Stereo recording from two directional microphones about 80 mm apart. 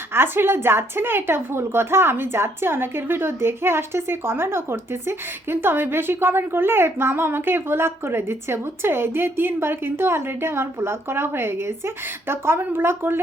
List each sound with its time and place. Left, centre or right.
0.1 s a woman's voice: right